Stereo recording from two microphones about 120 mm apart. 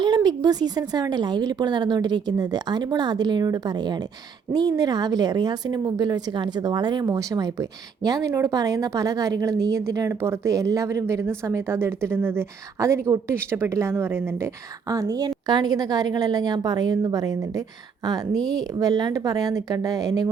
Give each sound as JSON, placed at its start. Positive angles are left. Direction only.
{"t": 0.0, "sound": "a woman's voice", "side_deg": -35}